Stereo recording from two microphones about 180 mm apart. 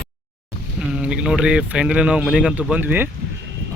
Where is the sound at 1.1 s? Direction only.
5° right (ahead or behind).